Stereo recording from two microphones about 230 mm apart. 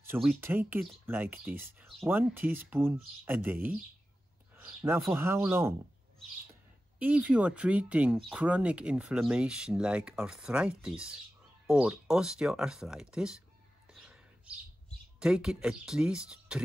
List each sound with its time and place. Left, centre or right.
0.0 s speech: centre
5.0 s speech: centre
7.0 s speech: centre
14.0 s bird: centre
15.1 s speech: centre